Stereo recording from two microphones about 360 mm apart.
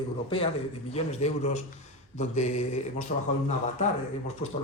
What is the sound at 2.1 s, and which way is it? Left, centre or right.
Mantra, centre.